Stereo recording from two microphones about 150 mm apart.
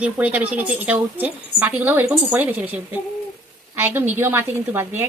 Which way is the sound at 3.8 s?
15° right (ahead or behind).